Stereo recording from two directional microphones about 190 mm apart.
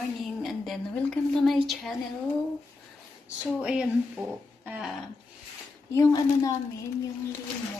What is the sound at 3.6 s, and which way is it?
A woman's voice, 5° right (ahead or behind).